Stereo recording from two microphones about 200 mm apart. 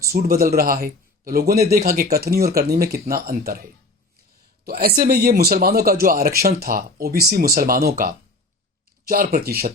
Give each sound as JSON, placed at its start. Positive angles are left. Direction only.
{"t": 0.1, "sound": "speech", "side_deg": -50}